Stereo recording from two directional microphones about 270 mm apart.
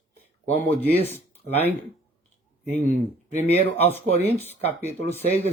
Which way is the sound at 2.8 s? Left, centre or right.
Left.